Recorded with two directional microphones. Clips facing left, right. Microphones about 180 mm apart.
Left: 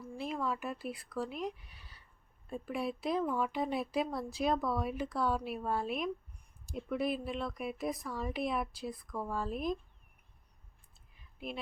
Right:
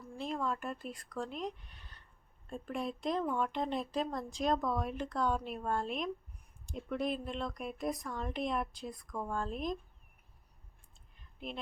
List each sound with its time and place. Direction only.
0.0 s speech: 5° left (ahead or behind)
11.1 s clicking: 5° left (ahead or behind)